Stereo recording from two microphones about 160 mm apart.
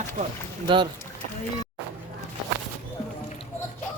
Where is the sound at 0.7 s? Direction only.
30° right (ahead or behind).